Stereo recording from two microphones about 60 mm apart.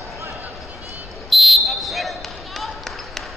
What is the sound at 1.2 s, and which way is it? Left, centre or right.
Basketball bounce, centre.